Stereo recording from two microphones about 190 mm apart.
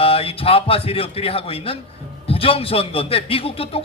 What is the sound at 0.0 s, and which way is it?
A man's voice, 30° left (ahead or behind).